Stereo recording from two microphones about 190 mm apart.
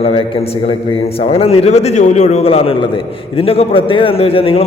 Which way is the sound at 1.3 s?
30° left (ahead or behind).